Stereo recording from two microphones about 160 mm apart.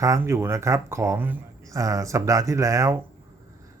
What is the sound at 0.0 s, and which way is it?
Speech, 20° right (ahead or behind).